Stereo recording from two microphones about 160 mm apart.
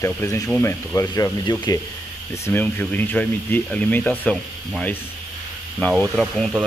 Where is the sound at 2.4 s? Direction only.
10° left (ahead or behind).